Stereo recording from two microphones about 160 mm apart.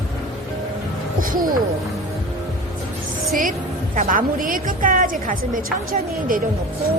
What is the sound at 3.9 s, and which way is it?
A woman's voice, 55° right (ahead or behind).